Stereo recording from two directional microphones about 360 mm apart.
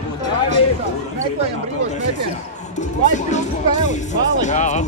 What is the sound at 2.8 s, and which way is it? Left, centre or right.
Speech, centre.